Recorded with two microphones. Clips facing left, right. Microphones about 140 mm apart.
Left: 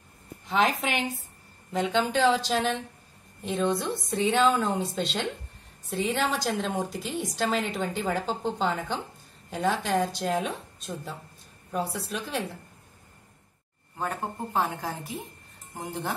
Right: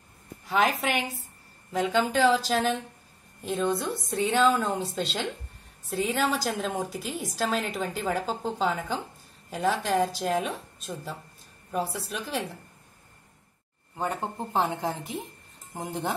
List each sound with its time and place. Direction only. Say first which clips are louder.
0.5 s a woman's voice: even; 5° right (ahead or behind)
13.9 s a woman's voice: right 1 dB; 20° right (ahead or behind)